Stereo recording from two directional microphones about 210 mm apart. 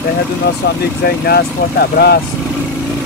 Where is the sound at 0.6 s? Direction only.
50° left (ahead or behind).